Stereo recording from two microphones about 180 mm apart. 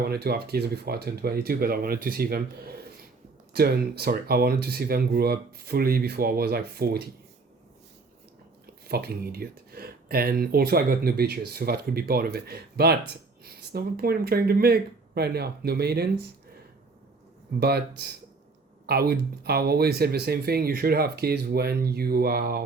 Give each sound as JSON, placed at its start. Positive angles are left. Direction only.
{"t": 0.1, "sound": "speech", "side_deg": -60}
{"t": 8.9, "sound": "speech", "side_deg": -60}
{"t": 17.6, "sound": "speech", "side_deg": -60}